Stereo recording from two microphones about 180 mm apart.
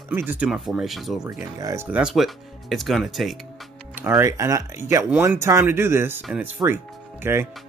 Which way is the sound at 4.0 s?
10° right (ahead or behind).